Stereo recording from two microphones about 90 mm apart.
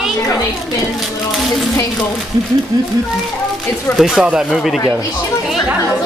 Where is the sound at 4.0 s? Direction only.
5° right (ahead or behind).